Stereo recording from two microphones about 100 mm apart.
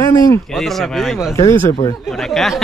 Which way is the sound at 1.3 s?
30° left (ahead or behind).